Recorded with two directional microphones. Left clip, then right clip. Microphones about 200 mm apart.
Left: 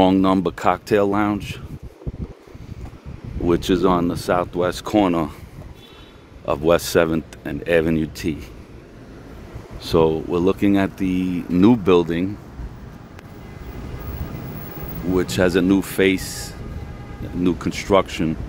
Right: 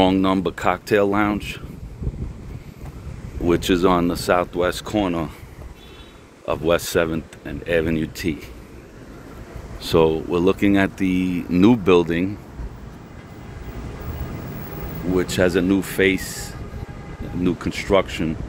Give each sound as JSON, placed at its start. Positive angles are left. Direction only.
{"t": 0.0, "sound": "speech", "side_deg": 15}
{"t": 3.4, "sound": "speech", "side_deg": 10}
{"t": 4.8, "sound": "speech", "side_deg": 35}
{"t": 6.4, "sound": "speech", "side_deg": 20}
{"t": 9.8, "sound": "speech", "side_deg": 10}
{"t": 15.1, "sound": "speech", "side_deg": 10}
{"t": 17.6, "sound": "speech", "side_deg": 15}